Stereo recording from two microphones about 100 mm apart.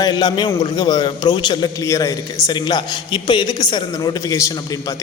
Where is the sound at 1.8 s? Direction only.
35° left (ahead or behind).